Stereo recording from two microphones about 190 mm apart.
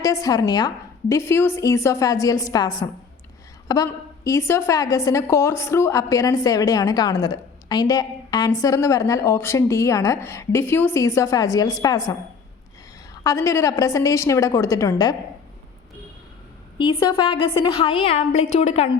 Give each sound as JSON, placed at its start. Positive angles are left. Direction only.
{"t": 0.0, "sound": "a woman's voice", "side_deg": 20}
{"t": 13.2, "sound": "a woman's voice", "side_deg": 15}
{"t": 16.7, "sound": "a woman's voice", "side_deg": 25}